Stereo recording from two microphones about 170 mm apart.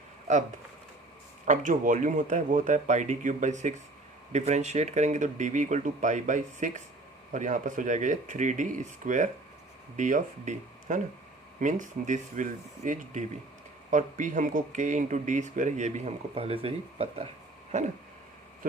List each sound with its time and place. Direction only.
1.5 s speech: 50° right (ahead or behind)
17.7 s a sound: 40° right (ahead or behind)
18.6 s speech: 55° right (ahead or behind)